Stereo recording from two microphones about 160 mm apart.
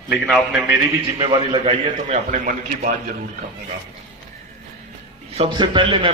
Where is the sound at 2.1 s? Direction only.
50° right (ahead or behind).